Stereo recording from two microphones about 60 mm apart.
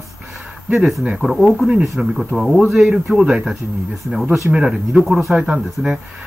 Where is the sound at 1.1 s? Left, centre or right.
Centre.